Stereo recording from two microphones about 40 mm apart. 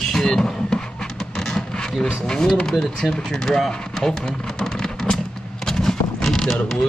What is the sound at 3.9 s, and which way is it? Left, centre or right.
Vehicle, centre.